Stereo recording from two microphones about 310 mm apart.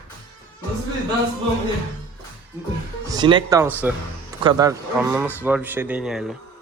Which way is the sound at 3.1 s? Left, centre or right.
Centre.